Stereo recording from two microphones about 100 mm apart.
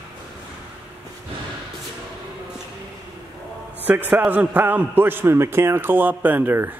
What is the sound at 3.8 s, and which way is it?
A man's voice, 15° right (ahead or behind).